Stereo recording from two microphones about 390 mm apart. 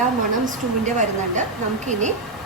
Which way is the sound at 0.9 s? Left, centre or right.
Centre.